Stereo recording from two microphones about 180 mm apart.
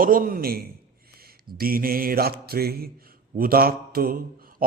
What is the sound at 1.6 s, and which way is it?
Mantra, 55° right (ahead or behind).